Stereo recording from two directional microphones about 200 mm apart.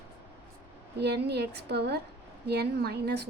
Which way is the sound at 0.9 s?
55° right (ahead or behind).